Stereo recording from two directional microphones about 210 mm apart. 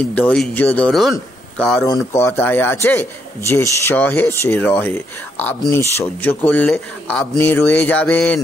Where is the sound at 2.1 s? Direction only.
15° left (ahead or behind).